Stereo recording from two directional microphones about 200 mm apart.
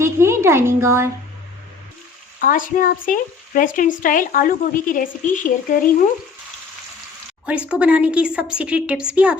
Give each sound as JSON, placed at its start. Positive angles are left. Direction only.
{"t": 0.0, "sound": "a sound", "side_deg": -15}
{"t": 2.4, "sound": "speech", "side_deg": 40}
{"t": 7.7, "sound": "a woman's voice", "side_deg": -5}